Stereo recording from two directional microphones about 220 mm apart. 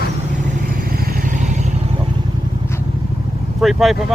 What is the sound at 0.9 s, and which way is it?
Vehicle, 40° right (ahead or behind).